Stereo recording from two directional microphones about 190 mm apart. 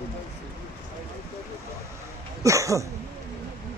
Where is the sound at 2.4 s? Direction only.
15° right (ahead or behind).